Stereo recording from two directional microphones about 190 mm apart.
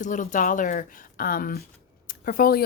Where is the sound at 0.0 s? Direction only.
40° left (ahead or behind).